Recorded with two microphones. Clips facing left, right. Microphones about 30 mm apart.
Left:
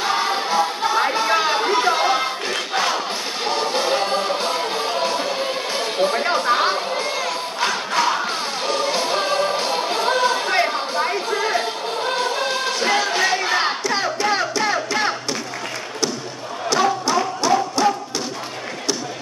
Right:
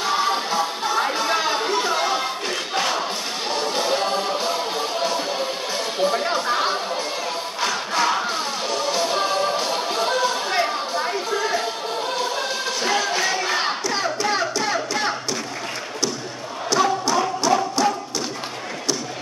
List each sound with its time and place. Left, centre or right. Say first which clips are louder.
0.0 s music: left 1 dB; centre
5.9 s a sound: left 2 dB; centre
8.0 s music: even; centre
8.6 s music: left 2 dB; left
16.7 s a sound: left 1 dB; centre
17.8 s music: left 4 dB; left